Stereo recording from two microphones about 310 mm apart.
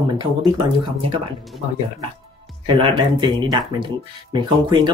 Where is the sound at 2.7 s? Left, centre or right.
Centre.